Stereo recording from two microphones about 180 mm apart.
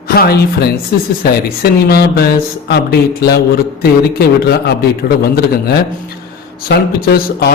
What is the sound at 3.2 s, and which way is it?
A man's voice, 65° left (ahead or behind).